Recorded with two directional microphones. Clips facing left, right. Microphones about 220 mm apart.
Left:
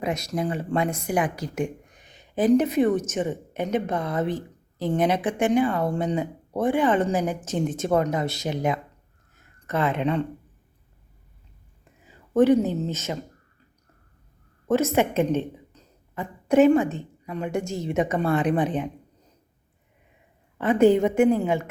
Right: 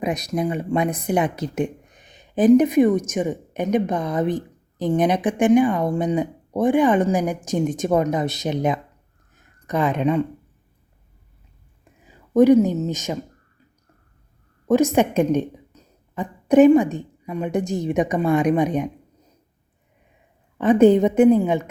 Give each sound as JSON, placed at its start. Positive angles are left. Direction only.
{"t": 0.0, "sound": "a woman's voice", "side_deg": -15}
{"t": 9.3, "sound": "a sound", "side_deg": -15}
{"t": 12.0, "sound": "speech", "side_deg": -10}
{"t": 14.7, "sound": "speech", "side_deg": -15}
{"t": 20.6, "sound": "a woman's voice", "side_deg": -20}